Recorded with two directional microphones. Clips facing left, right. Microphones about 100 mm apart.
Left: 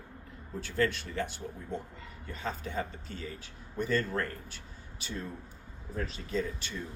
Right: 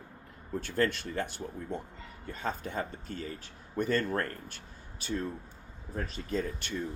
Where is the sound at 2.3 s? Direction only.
45° right (ahead or behind).